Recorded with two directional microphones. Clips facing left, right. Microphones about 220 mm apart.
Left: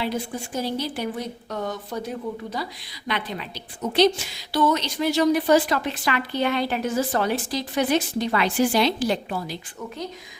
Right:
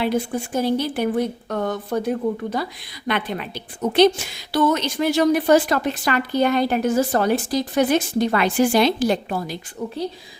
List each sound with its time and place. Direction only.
0.0 s a woman's voice: 55° right (ahead or behind)